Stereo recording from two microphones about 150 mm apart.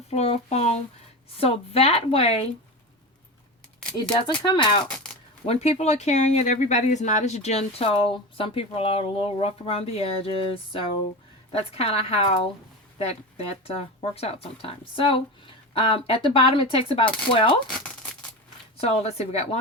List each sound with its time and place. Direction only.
0.1 s a sound: 45° left (ahead or behind)
1.4 s speech: 40° left (ahead or behind)
4.1 s speech: 30° left (ahead or behind)
5.5 s speech: 45° left (ahead or behind)
17.7 s speech: 5° left (ahead or behind)
18.8 s speech: 45° left (ahead or behind)